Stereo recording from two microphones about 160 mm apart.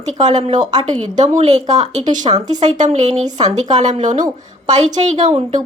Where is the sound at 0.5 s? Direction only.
25° right (ahead or behind).